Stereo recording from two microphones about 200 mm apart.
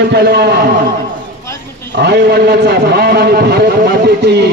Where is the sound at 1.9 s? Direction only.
50° right (ahead or behind).